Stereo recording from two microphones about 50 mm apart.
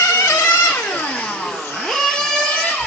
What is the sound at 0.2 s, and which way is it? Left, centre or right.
Music, left.